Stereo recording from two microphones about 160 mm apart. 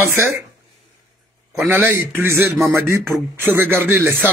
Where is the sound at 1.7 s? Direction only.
10° right (ahead or behind).